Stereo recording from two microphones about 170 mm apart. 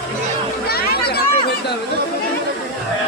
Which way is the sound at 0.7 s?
65° left (ahead or behind).